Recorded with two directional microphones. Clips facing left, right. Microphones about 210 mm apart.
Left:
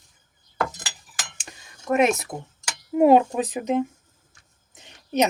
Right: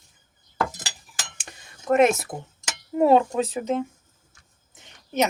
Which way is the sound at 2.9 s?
10° left (ahead or behind).